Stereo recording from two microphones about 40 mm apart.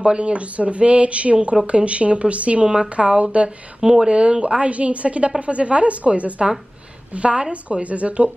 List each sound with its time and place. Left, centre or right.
0.0 s a woman's voice: right
3.8 s a woman's voice: centre; by 8.3 s right